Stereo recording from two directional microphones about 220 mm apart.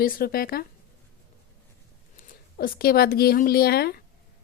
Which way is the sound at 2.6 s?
45° left (ahead or behind).